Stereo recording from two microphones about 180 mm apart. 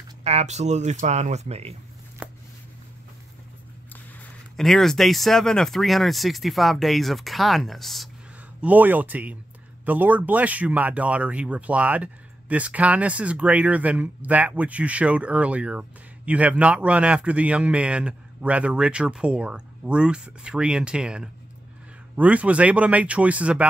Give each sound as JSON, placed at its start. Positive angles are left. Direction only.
{"t": 0.2, "sound": "speech", "side_deg": -35}
{"t": 2.2, "sound": "a sound", "side_deg": -5}
{"t": 4.6, "sound": "speech", "side_deg": 0}